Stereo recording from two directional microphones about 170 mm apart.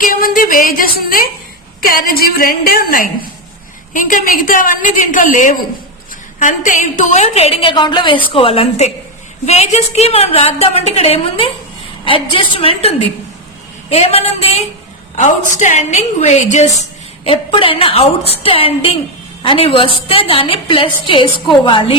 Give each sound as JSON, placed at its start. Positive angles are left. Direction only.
{"t": 0.0, "sound": "music", "side_deg": 55}
{"t": 1.8, "sound": "a woman's voice", "side_deg": 55}
{"t": 17.2, "sound": "a woman's voice", "side_deg": 30}